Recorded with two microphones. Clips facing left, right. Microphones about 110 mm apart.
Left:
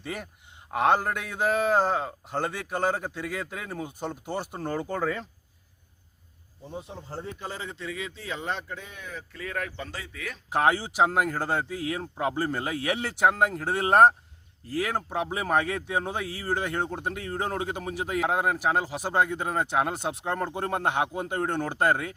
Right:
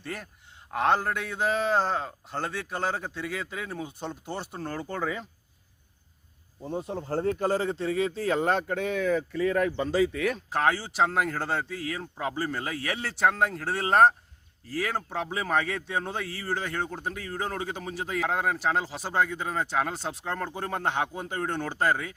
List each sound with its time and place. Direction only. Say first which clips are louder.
0.0 s speech: left 2 dB; 10° left (ahead or behind)
6.6 s speech: right 7 dB; 40° right (ahead or behind); by 9.0 s 65° right (ahead or behind)
10.1 s speech: right 10 dB; 55° right (ahead or behind)
10.5 s speech: left 6 dB; 15° left (ahead or behind)